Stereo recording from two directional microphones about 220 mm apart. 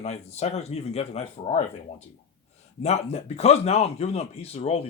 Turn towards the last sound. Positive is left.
turn(degrees=30)  # may be behind; listen again after turning